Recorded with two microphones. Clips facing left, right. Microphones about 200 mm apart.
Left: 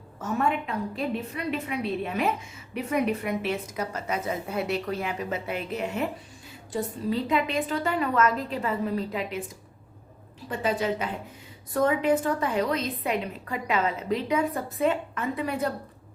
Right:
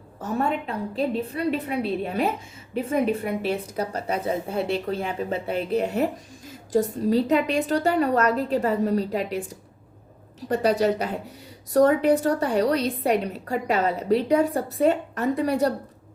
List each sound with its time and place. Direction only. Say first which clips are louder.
0.2 s a woman's voice: right 1 dB; 35° right (ahead or behind)
10.5 s a woman's voice: right 6 dB; 40° right (ahead or behind)